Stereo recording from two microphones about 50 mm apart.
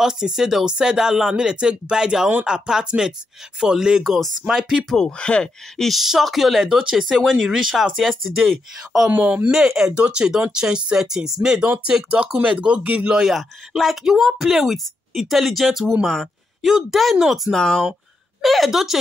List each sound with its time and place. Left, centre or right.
0.0 s speech: centre
4.0 s speech: centre
5.0 s speech: left
5.8 s speech: centre
9.2 s speech: right
9.5 s speech: centre
9.9 s speech: centre
12.0 s speech: right
13.3 s speech: centre
17.6 s speech: centre
18.4 s speech: centre